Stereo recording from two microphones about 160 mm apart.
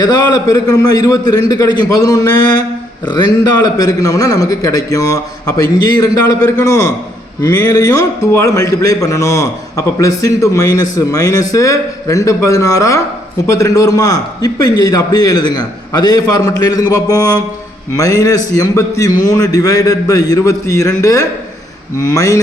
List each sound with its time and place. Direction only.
0.0 s a man's voice: 25° left (ahead or behind)